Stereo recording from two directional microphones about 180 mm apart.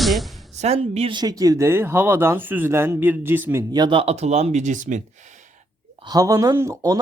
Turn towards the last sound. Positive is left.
turn(degrees=-15)  # may be behind; listen again after turning